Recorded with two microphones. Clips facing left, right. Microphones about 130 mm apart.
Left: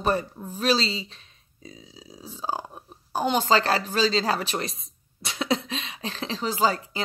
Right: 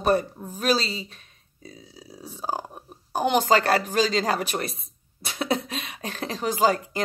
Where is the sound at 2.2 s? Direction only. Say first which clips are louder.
Even; 60° right (ahead or behind).